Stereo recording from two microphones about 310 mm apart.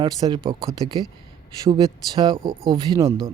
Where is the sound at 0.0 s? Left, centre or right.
Centre.